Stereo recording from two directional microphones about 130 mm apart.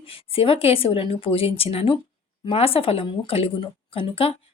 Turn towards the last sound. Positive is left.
turn(degrees=45)  # may be behind; listen again after turning